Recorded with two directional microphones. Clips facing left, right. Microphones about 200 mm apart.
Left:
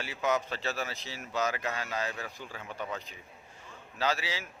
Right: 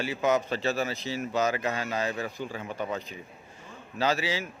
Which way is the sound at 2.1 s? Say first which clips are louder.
Right 8 dB; 20° right (ahead or behind).